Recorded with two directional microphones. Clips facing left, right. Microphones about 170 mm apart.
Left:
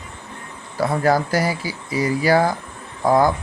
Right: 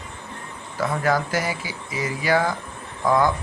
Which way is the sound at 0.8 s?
35° left (ahead or behind).